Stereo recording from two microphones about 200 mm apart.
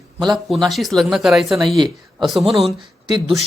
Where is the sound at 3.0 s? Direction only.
20° right (ahead or behind).